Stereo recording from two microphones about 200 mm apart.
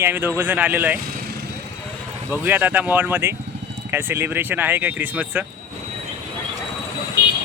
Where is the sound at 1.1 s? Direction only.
50° right (ahead or behind).